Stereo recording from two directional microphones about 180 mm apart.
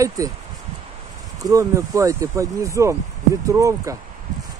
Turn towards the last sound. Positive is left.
turn(degrees=-15)  # may be behind; listen again after turning